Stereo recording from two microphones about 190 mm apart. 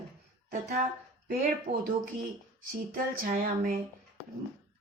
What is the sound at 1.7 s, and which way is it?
Speech, 30° right (ahead or behind).